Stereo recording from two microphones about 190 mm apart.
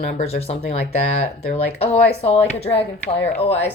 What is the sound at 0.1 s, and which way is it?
Speech, 35° left (ahead or behind).